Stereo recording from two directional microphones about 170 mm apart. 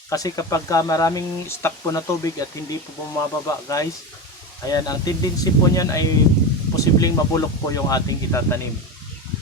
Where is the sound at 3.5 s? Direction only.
20° left (ahead or behind).